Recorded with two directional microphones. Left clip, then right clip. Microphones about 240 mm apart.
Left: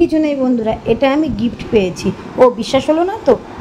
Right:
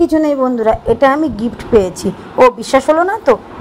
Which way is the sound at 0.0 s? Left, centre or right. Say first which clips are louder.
Right 2 dB; right.